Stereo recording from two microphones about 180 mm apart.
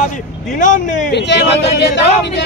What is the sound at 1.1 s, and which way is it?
Speech, 75° left (ahead or behind).